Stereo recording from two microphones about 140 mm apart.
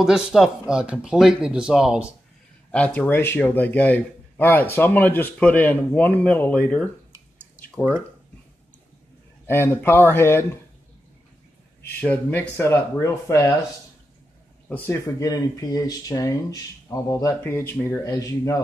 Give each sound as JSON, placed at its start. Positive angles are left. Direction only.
{"t": 0.0, "sound": "speech", "side_deg": 0}
{"t": 2.7, "sound": "a man's voice", "side_deg": 10}
{"t": 9.5, "sound": "a man's voice", "side_deg": 20}
{"t": 12.0, "sound": "a man's voice", "side_deg": 10}
{"t": 14.7, "sound": "a man's voice", "side_deg": 15}
{"t": 15.2, "sound": "speech", "side_deg": 25}